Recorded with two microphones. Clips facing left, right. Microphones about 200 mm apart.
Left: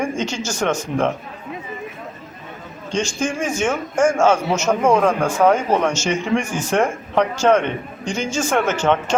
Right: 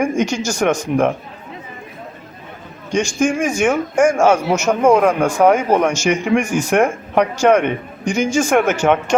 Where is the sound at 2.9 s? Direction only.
10° right (ahead or behind).